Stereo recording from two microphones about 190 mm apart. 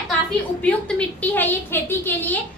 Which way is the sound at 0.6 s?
5° left (ahead or behind).